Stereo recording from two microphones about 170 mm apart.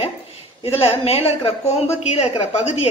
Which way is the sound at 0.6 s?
35° left (ahead or behind).